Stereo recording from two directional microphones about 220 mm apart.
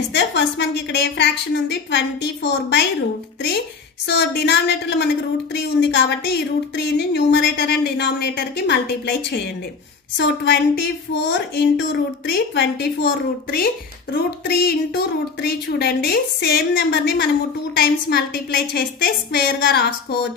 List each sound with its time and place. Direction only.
0.1 s a woman's voice: 50° left (ahead or behind)
4.1 s a woman's voice: 50° left (ahead or behind)